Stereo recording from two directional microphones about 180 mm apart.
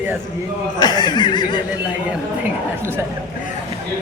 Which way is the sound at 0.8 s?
25° left (ahead or behind).